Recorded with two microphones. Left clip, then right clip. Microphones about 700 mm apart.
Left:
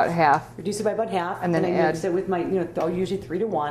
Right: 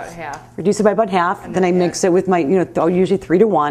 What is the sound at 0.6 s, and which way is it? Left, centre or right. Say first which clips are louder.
A woman's voice: right 10 dB; right.